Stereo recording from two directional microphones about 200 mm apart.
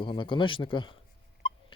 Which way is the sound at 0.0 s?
25° left (ahead or behind).